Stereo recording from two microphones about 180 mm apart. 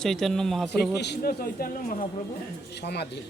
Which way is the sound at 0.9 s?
70° left (ahead or behind).